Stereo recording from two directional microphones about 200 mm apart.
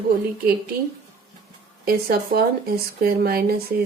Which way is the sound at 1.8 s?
50° right (ahead or behind).